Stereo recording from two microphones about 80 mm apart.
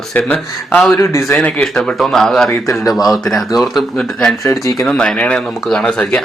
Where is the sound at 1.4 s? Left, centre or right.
Centre.